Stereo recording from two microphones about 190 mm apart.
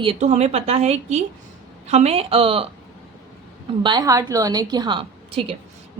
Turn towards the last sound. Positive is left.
turn(degrees=-30)  # may be behind; listen again after turning